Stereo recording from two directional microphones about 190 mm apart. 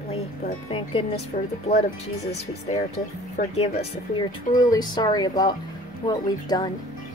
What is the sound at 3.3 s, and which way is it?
Speech, 35° left (ahead or behind).